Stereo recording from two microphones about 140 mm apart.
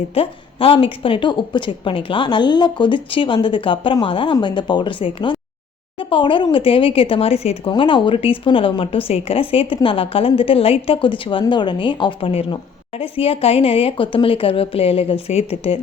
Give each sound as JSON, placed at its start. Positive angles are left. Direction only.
{"t": 0.1, "sound": "speech", "side_deg": 40}
{"t": 7.7, "sound": "speech", "side_deg": 35}